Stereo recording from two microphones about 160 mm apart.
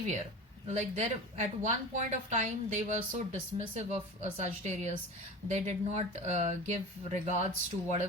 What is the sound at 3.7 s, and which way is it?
Speech, 45° right (ahead or behind).